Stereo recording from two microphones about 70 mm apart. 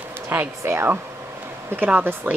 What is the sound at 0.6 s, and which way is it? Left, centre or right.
Speech, right.